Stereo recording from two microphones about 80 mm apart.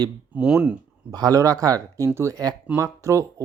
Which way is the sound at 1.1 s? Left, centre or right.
Right.